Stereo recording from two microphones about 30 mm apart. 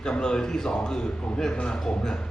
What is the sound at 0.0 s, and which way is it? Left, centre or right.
A man's voice, left.